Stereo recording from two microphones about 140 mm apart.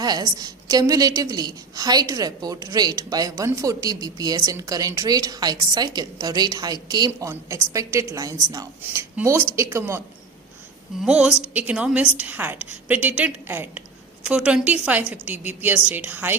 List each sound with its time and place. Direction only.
0.0 s a woman's voice: 30° right (ahead or behind)
8.8 s a woman's voice: 15° right (ahead or behind)
11.0 s a woman's voice: 5° right (ahead or behind)